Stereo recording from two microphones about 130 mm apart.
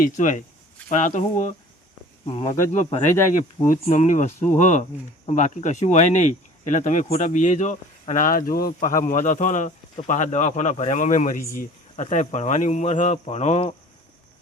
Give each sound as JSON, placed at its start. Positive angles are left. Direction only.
{"t": 0.0, "sound": "speech", "side_deg": 80}
{"t": 2.4, "sound": "speech", "side_deg": 55}